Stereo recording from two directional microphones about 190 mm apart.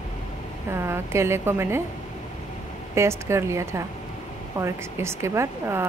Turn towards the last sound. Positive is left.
turn(degrees=-15)  # may be behind; listen again after turning